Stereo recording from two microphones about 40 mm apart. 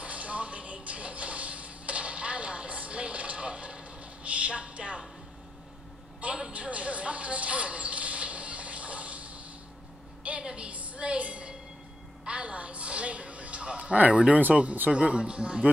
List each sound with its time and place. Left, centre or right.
0.0 s music: right
6.2 s a sound: right
14.5 s speech: right